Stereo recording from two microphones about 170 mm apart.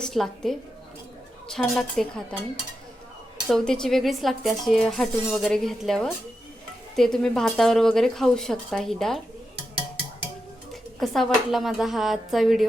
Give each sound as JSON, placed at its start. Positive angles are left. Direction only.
{"t": 0.0, "sound": "speech", "side_deg": 0}
{"t": 3.5, "sound": "speech", "side_deg": 5}
{"t": 11.0, "sound": "speech", "side_deg": 0}